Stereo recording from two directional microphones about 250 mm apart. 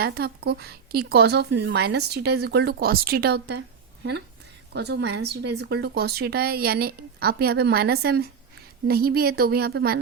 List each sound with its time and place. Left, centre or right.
0.0 s speech: right
4.7 s speech: right